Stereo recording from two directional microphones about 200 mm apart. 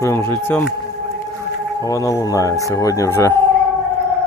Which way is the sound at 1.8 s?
15° left (ahead or behind).